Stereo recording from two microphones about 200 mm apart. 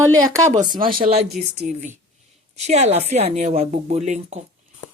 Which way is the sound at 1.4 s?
45° right (ahead or behind).